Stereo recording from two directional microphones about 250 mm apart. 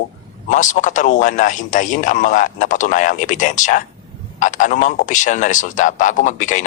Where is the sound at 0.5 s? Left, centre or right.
Left.